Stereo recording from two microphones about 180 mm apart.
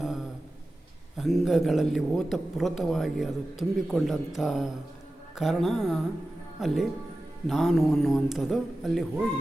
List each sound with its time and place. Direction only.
1.2 s a man's voice: centre (ahead or behind)